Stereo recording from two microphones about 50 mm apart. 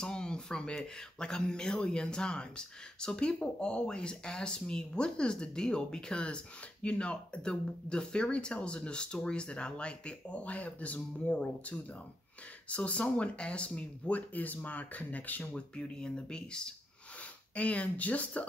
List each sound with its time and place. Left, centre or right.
0.0 s speech: centre; by 15.5 s left
15.5 s speech: centre